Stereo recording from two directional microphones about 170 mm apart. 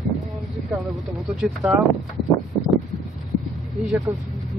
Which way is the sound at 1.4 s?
5° right (ahead or behind).